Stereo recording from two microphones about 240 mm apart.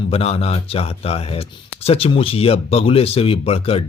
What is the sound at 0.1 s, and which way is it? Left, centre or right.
A man's voice, left.